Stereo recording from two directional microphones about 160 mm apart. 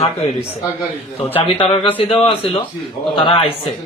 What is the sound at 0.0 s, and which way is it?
Speech, 40° left (ahead or behind).